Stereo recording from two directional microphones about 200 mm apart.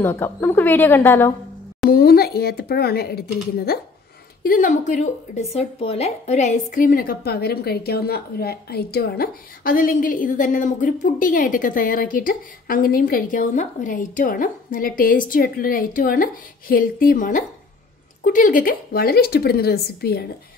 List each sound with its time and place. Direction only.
0.0 s a woman's voice: 10° left (ahead or behind)
1.9 s a woman's voice: 50° left (ahead or behind)